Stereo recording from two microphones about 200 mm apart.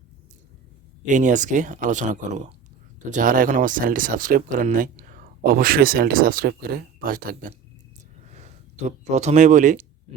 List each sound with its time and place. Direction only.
1.0 s speech: 40° right (ahead or behind)
10.1 s owl: 30° right (ahead or behind)